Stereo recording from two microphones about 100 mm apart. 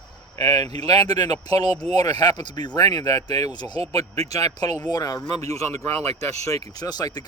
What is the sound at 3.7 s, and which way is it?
Speech, 85° right.